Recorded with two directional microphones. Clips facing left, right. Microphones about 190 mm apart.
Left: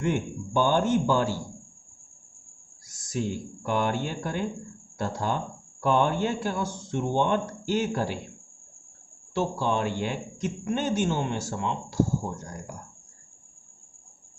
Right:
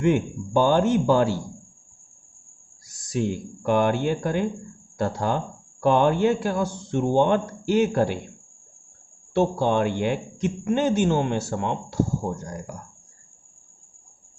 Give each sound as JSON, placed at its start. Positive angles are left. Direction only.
{"t": 0.0, "sound": "speech", "side_deg": -65}
{"t": 3.1, "sound": "speech", "side_deg": -65}
{"t": 9.3, "sound": "speech", "side_deg": -60}